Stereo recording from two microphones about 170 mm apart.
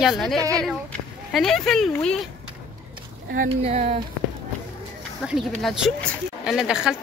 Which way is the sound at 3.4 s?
40° right (ahead or behind).